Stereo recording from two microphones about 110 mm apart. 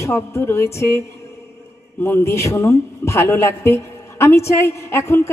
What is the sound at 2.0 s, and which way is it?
A woman's voice, 20° left (ahead or behind).